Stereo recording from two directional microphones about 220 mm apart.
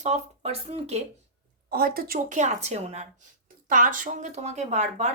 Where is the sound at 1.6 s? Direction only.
40° right (ahead or behind).